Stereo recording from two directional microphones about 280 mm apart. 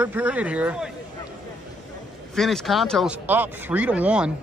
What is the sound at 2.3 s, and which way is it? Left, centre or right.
Speech, centre.